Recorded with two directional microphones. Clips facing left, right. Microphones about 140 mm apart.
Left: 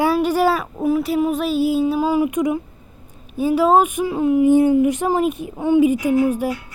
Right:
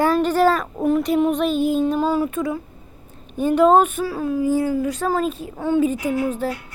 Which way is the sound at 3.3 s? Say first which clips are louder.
Right 1 dB; 5° left (ahead or behind).